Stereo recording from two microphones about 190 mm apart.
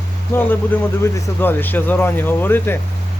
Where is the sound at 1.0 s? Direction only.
10° left (ahead or behind).